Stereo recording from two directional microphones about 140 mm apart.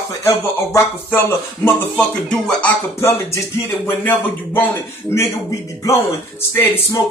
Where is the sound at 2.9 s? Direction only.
20° left (ahead or behind).